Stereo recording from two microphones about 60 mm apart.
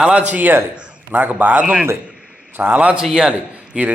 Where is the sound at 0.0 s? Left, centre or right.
Centre.